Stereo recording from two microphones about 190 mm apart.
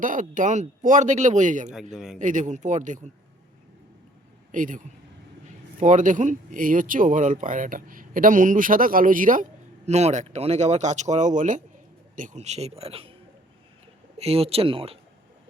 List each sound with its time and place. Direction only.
0.0 s speech: 45° right (ahead or behind)
1.9 s a man's voice: centre (ahead or behind)
2.1 s speech: 40° right (ahead or behind)
4.5 s speech: 45° right (ahead or behind)
5.8 s speech: 40° right (ahead or behind)
14.2 s speech: 30° right (ahead or behind)